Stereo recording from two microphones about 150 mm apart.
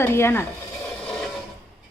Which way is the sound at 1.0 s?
5° left (ahead or behind).